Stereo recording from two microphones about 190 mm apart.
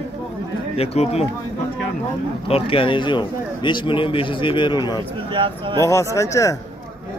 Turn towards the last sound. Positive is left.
turn(degrees=15)  # may be behind; listen again after turning